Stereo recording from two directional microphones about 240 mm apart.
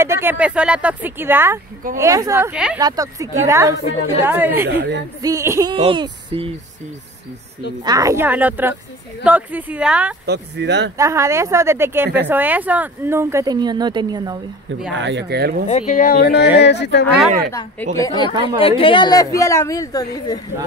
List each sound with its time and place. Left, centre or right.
0.0 s speech: centre
4.6 s speech: right
5.2 s speech: centre
7.8 s speech: centre
10.2 s speech: right
11.0 s speech: centre
15.0 s speech: right
15.7 s speech: left
17.5 s a woman's voice: centre
18.3 s speech: centre
18.6 s a woman's voice: left